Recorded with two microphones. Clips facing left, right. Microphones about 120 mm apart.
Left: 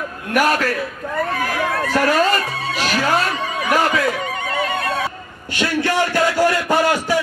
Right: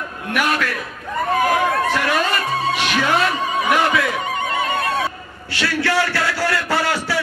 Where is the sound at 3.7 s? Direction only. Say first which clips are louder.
Left 2 dB; 40° left (ahead or behind).